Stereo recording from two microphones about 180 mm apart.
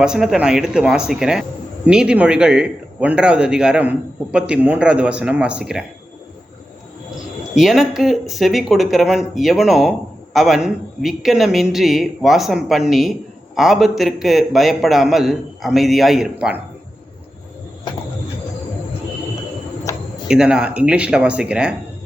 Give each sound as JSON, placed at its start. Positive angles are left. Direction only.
{"t": 0.0, "sound": "speech", "side_deg": -5}
{"t": 7.5, "sound": "speech", "side_deg": 0}
{"t": 20.2, "sound": "speech", "side_deg": -5}